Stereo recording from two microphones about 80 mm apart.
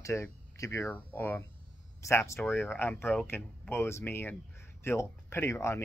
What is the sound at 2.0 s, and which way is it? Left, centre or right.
A man's voice, left.